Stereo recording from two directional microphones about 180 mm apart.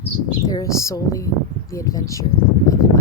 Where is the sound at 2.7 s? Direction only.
20° left (ahead or behind).